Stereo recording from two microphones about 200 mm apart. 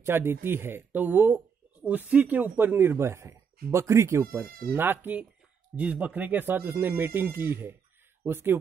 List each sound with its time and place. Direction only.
0.0 s speech: 10° right (ahead or behind)
4.5 s speech: 50° right (ahead or behind)
4.7 s speech: 10° right (ahead or behind)